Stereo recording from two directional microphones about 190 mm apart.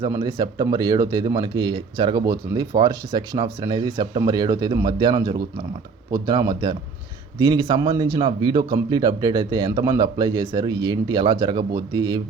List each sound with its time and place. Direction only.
0.2 s speech: 25° right (ahead or behind)